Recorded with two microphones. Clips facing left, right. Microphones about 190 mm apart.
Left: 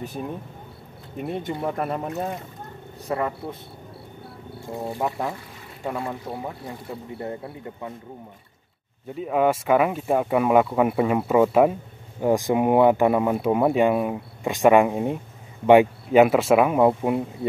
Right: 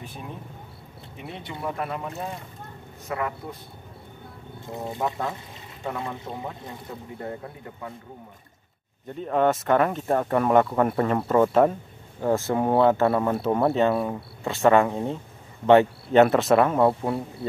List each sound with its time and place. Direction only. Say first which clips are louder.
1.1 s speech: left 9 dB; 50° left (ahead or behind)
1.9 s a man's voice: left 5 dB; 30° left (ahead or behind)
4.7 s speech: left 2 dB; 20° left (ahead or behind)
7.8 s a man's voice: left 2 dB; 25° left (ahead or behind)
9.1 s speech: left 1 dB; 5° left (ahead or behind)